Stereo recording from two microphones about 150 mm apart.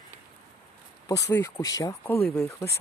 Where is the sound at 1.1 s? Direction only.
20° left (ahead or behind).